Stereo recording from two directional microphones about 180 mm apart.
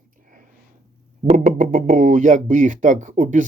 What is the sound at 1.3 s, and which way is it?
Speech, 45° right (ahead or behind).